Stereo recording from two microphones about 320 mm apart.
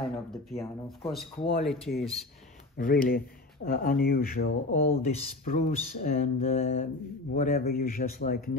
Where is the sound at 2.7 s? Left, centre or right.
Left.